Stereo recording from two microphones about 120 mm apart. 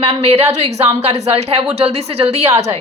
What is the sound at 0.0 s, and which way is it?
A woman's voice, 60° right (ahead or behind).